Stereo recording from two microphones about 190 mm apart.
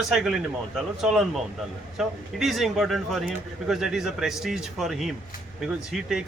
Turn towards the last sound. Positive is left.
turn(degrees=0)  # may be behind; listen again after turning